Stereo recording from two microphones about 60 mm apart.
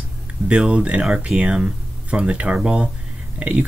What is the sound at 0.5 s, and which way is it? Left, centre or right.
Speech, centre.